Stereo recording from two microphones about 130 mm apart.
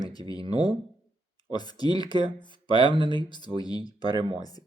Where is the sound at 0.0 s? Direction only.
30° left (ahead or behind).